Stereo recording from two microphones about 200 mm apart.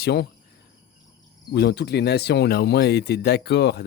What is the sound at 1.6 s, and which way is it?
Speech, 55° left (ahead or behind).